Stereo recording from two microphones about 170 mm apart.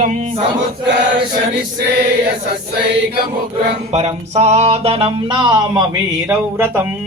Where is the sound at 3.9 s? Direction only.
40° right (ahead or behind); by 6.8 s 15° right (ahead or behind).